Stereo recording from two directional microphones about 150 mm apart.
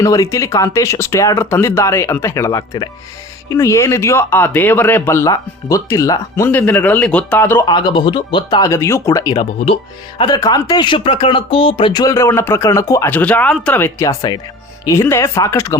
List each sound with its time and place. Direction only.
0.0 s speech: 20° left (ahead or behind)
7.6 s speech: 30° left (ahead or behind)
13.1 s speech: 10° left (ahead or behind)